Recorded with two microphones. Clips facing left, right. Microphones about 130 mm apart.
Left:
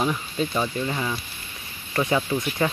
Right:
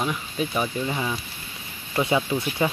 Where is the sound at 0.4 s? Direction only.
10° right (ahead or behind).